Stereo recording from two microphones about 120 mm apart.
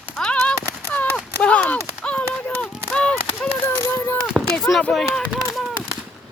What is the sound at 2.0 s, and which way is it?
Run, 10° left (ahead or behind).